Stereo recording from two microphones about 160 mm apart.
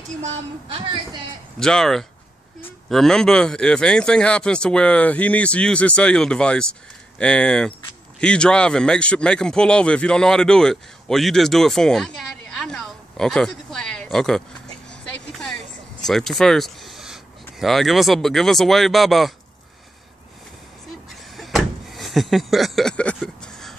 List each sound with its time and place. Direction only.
0.2 s a woman's voice: 35° right (ahead or behind)
1.6 s speech: 5° left (ahead or behind)
14.9 s a sound: 5° left (ahead or behind)
16.1 s speech: centre (ahead or behind)
21.1 s door: centre (ahead or behind)